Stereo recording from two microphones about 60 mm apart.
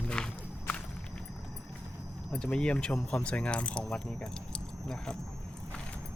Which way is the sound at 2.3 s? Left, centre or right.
Centre.